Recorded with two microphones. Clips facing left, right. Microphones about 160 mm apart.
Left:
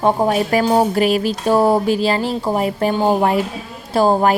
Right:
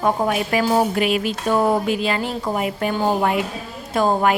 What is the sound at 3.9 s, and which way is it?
Speech, 35° left (ahead or behind).